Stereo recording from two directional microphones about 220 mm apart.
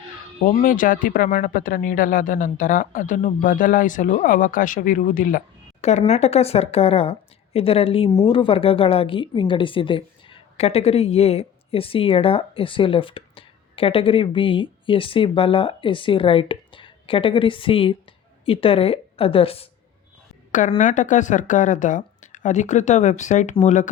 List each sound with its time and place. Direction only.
0.4 s speech: 35° left (ahead or behind)
20.5 s speech: 35° left (ahead or behind)